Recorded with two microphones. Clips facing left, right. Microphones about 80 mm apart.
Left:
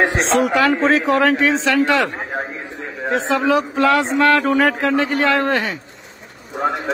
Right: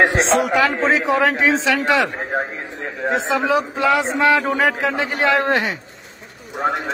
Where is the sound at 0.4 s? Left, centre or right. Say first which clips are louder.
Left 2 dB; centre.